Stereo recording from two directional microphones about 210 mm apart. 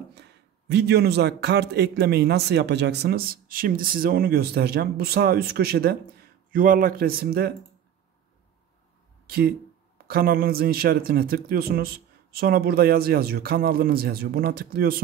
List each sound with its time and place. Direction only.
0.1 s a man's voice: 55° right (ahead or behind)
9.3 s a man's voice: 45° right (ahead or behind)